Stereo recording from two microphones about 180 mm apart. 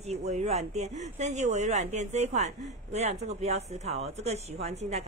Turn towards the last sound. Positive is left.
turn(degrees=-35)  # may be behind; listen again after turning